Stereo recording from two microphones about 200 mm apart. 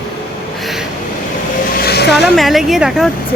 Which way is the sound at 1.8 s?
55° left (ahead or behind).